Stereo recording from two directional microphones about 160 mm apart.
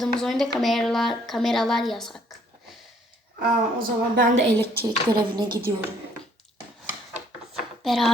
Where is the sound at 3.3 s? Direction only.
65° right (ahead or behind).